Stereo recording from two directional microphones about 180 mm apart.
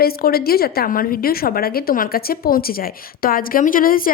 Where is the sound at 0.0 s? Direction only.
55° left (ahead or behind).